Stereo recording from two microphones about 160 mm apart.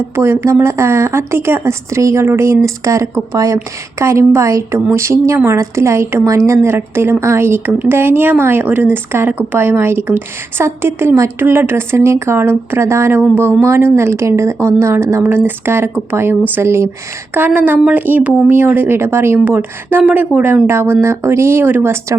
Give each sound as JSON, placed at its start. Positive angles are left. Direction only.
{"t": 0.2, "sound": "speech", "side_deg": -15}